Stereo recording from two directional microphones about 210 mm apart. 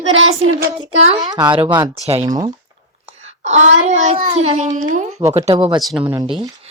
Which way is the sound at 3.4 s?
35° right (ahead or behind).